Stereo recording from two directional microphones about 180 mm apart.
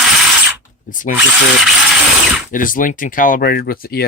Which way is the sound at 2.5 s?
50° left (ahead or behind).